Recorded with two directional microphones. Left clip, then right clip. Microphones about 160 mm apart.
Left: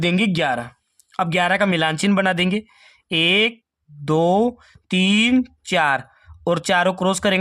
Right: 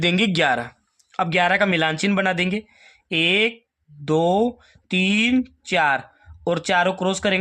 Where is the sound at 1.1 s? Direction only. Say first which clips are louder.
Even; 30° left (ahead or behind).